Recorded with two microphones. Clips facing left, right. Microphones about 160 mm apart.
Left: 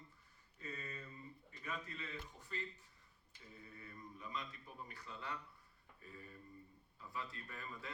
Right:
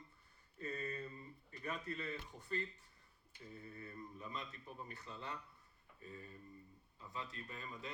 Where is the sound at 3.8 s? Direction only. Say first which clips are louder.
Right 1 dB; 35° right (ahead or behind).